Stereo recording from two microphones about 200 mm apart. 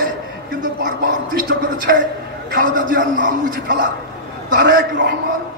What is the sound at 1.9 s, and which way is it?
Speech, 55° right (ahead or behind).